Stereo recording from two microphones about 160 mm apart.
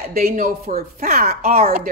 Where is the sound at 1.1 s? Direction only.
65° right (ahead or behind).